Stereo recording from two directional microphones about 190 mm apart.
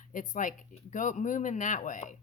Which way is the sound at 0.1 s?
45° left (ahead or behind).